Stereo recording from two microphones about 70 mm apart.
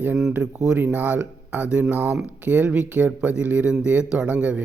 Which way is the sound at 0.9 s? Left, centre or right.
Right.